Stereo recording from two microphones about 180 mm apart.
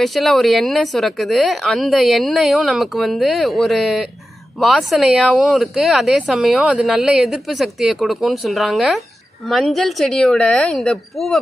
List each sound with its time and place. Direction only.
0.0 s speech: centre (ahead or behind)